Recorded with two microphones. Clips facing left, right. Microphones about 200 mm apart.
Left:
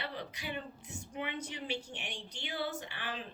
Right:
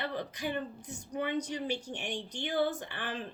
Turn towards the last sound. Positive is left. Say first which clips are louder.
# right 3 dB
turn(degrees=-50)  # may be behind; listen again after turning